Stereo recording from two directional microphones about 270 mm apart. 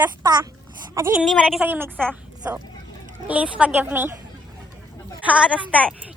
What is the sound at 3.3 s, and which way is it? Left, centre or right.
Speech, centre.